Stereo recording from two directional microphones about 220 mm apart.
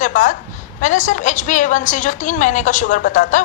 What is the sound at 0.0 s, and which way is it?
A woman's voice, 35° left (ahead or behind).